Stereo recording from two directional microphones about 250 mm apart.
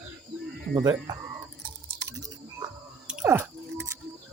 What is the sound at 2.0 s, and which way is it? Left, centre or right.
Chewing, centre.